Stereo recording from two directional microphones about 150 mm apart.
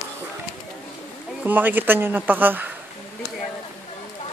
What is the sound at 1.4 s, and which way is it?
Speech, 10° right (ahead or behind).